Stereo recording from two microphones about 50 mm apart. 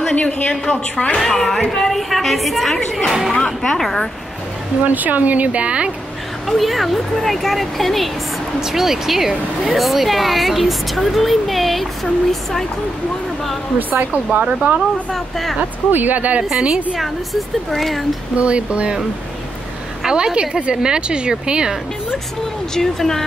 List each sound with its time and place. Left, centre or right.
0.1 s a woman's voice: left; by 4.1 s centre
4.8 s speech: right
6.4 s speech: centre
8.5 s a woman's voice: centre
13.7 s speech: right
14.4 s speech: right
15.1 s speech: centre
15.9 s speech: right
16.4 s a woman's voice: centre
16.9 s speech: centre
18.3 s speech: right
20.1 s a woman's voice: centre
22.8 s speech: centre